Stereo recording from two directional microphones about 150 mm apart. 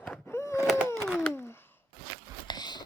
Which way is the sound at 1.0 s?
Centre (ahead or behind).